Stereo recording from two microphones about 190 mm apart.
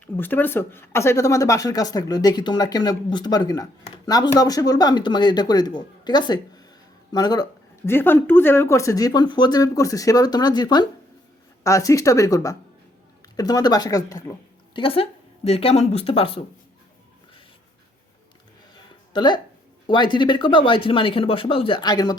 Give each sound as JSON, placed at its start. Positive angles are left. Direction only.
{"t": 0.2, "sound": "speech", "side_deg": 10}
{"t": 18.7, "sound": "a sound", "side_deg": 25}
{"t": 19.9, "sound": "speech", "side_deg": 25}